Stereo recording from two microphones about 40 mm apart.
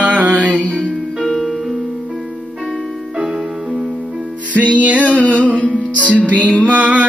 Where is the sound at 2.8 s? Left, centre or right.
Centre.